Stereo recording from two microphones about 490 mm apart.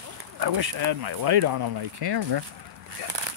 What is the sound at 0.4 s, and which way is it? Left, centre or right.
Speech, right.